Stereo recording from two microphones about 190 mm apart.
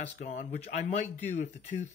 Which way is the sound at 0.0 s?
40° left (ahead or behind).